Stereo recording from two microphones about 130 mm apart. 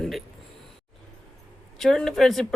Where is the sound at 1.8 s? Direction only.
5° left (ahead or behind).